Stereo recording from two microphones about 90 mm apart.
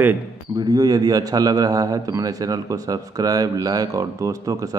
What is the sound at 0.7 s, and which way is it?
A man's voice, 45° right (ahead or behind).